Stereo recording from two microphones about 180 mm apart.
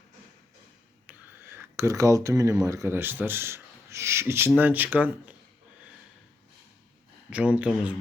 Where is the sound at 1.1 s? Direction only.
10° right (ahead or behind).